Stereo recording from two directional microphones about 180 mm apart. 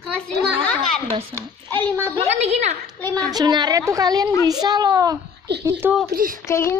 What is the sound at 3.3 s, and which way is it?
A woman's voice, 25° right (ahead or behind).